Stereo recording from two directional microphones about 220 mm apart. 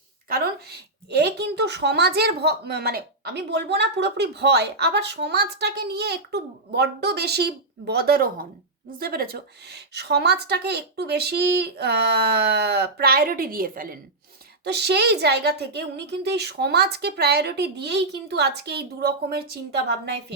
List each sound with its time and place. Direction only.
0.3 s a woman's voice: 45° right (ahead or behind)